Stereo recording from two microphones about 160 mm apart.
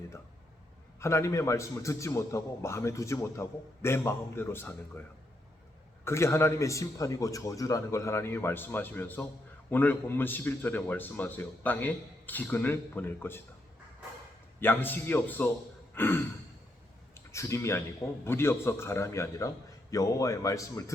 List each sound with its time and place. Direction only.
0.9 s a man's voice: 15° left (ahead or behind)
6.1 s a man's voice: 15° left (ahead or behind)
14.6 s a man's voice: 10° left (ahead or behind)
17.2 s a man's voice: 20° left (ahead or behind)